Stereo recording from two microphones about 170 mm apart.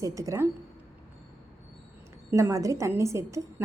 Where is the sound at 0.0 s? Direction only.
20° right (ahead or behind).